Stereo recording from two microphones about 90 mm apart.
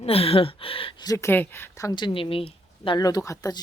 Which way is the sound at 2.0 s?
75° left (ahead or behind).